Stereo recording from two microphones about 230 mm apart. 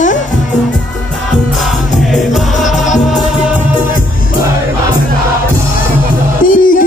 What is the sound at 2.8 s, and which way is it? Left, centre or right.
Music, left.